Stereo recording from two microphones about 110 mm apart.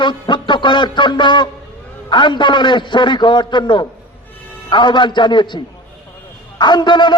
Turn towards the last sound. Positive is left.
turn(degrees=45)  # may be behind; listen again after turning